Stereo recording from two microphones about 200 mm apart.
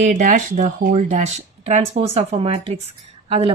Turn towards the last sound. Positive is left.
turn(degrees=-30)  # may be behind; listen again after turning